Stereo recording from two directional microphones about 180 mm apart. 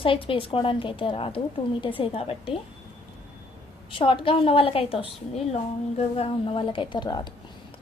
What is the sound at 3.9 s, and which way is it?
A woman's voice, 30° left (ahead or behind).